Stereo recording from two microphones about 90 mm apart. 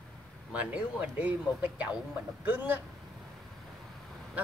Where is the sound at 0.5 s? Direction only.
15° right (ahead or behind).